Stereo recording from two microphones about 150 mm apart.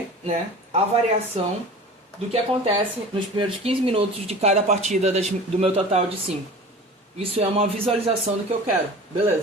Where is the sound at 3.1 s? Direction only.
35° right (ahead or behind).